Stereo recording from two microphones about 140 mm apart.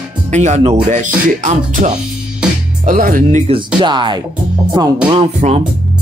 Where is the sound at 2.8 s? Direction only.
85° right.